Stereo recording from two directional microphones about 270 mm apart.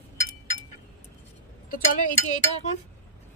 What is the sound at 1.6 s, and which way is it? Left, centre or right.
Speech, left.